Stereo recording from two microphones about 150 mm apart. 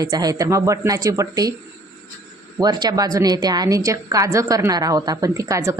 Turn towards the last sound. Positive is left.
turn(degrees=-20)  # may be behind; listen again after turning